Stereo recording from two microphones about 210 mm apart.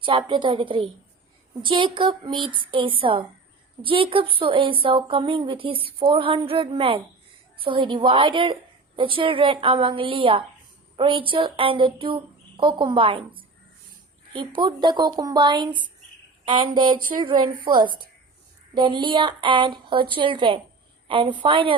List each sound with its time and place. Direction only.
0.0 s a woman's voice: 25° right (ahead or behind)
17.0 s speech: 40° right (ahead or behind)
17.2 s a woman's voice: 20° right (ahead or behind)